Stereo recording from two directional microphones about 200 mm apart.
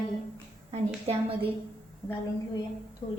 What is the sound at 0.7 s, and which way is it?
Speech, 30° right (ahead or behind).